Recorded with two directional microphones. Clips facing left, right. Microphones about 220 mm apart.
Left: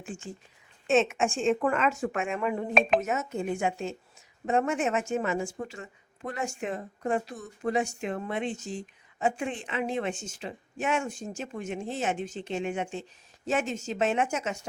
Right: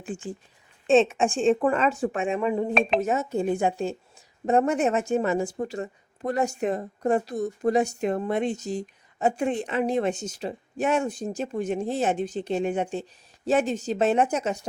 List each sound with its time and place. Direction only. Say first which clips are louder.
0.0 s speech: right 6 dB; 35° right (ahead or behind)